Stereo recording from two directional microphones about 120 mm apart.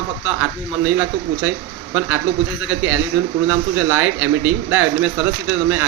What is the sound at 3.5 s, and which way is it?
Speech, 15° right (ahead or behind).